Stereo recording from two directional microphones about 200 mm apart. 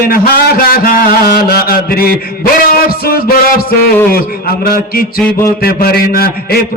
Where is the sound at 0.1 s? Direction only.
50° left (ahead or behind).